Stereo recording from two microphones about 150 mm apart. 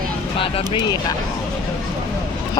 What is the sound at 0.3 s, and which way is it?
Speech, 35° left (ahead or behind).